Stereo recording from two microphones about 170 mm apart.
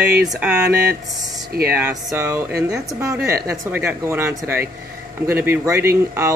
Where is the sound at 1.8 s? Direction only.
15° right (ahead or behind).